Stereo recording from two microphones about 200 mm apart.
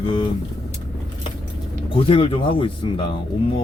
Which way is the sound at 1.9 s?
25° left (ahead or behind).